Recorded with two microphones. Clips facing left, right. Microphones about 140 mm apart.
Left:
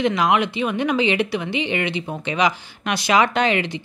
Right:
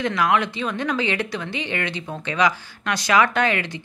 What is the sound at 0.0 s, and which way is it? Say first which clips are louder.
Speech: left 2 dB; 20° left (ahead or behind).